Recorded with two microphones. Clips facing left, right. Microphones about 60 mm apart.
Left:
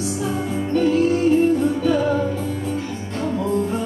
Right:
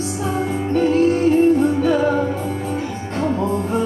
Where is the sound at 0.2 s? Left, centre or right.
Right.